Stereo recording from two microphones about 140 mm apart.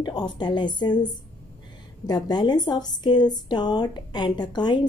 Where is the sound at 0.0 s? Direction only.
30° left (ahead or behind).